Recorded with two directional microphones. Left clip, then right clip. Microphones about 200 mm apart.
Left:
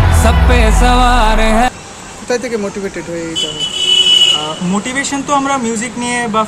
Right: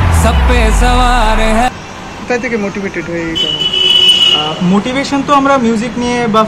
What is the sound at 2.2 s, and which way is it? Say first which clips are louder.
Speech: right 2 dB; 50° left (ahead or behind).